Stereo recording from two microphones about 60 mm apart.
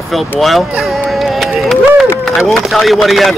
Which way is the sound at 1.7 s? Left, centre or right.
Centre.